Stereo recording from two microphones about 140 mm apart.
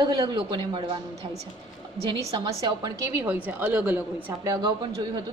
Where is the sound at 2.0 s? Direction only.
35° right (ahead or behind).